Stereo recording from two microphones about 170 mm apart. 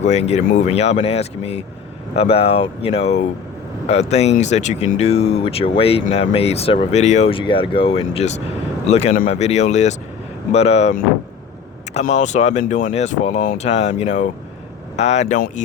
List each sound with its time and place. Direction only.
0.0 s speech: 40° left (ahead or behind)